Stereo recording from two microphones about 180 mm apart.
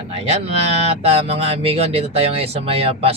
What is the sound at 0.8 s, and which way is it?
Speech, 35° right (ahead or behind).